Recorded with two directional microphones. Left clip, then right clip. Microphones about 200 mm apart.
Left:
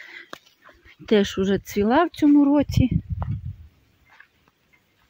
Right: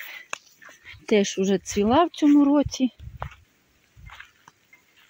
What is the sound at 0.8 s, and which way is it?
Speech, 15° left (ahead or behind).